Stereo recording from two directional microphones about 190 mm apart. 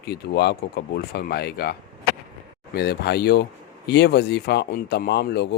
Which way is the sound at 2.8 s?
60° left (ahead or behind).